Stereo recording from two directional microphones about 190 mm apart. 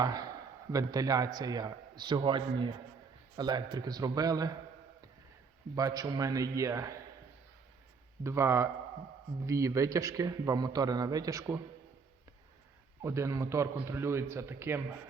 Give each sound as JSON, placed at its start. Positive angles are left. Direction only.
{"t": 0.0, "sound": "a man's voice", "side_deg": -20}
{"t": 5.7, "sound": "a man's voice", "side_deg": -20}
{"t": 8.2, "sound": "a man's voice", "side_deg": -15}
{"t": 13.0, "sound": "a man's voice", "side_deg": -15}